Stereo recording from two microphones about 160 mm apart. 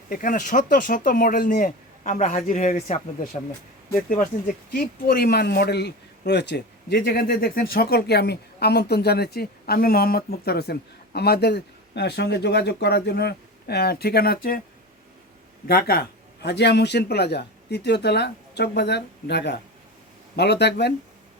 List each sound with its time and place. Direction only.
0.1 s speech: 55° left (ahead or behind)
4.7 s speech: 70° left (ahead or behind)
15.6 s a man's voice: 70° left (ahead or behind); by 20.9 s 90° left